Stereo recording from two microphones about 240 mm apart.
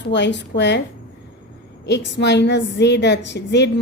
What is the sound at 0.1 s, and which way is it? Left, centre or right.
Speech, left.